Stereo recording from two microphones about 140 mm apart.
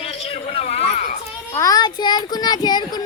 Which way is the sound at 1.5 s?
25° left (ahead or behind).